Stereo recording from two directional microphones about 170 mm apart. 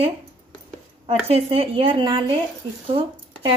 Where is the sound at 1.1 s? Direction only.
35° right (ahead or behind).